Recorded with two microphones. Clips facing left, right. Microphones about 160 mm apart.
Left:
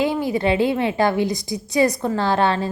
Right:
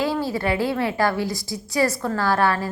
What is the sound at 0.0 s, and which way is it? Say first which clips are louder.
A woman's voice: left 3 dB; 20° left (ahead or behind).